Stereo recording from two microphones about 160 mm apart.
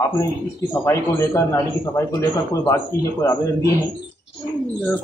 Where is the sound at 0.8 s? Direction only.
15° left (ahead or behind).